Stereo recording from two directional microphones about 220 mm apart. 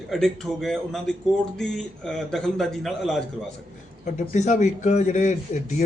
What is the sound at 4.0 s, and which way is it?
Speech, 35° left (ahead or behind).